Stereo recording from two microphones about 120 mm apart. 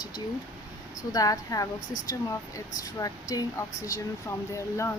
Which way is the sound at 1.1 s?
30° left (ahead or behind).